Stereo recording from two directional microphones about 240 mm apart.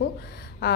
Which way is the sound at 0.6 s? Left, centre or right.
Left.